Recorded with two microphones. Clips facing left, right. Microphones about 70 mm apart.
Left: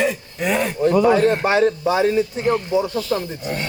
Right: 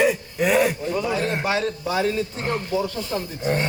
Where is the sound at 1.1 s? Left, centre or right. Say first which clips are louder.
Left 9 dB; left.